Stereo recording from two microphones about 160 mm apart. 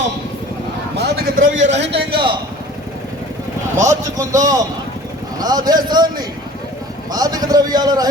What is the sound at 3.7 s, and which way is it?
Speech, 20° right (ahead or behind).